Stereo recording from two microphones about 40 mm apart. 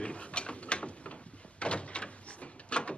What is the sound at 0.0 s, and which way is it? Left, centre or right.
Mechanisms, left.